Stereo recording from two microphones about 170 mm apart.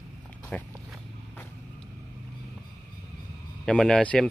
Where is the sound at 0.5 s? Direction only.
5° left (ahead or behind).